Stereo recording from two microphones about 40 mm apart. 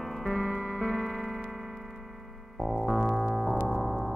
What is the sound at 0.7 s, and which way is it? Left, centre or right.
Music, centre.